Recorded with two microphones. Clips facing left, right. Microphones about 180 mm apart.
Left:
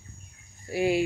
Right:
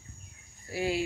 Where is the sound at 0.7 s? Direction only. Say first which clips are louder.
Left 6 dB; 15° left (ahead or behind).